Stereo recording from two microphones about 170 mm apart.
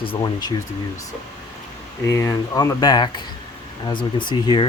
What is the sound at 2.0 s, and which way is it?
Speech, 20° left (ahead or behind).